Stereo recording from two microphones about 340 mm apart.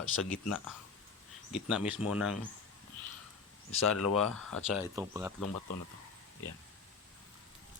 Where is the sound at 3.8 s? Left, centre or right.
Left.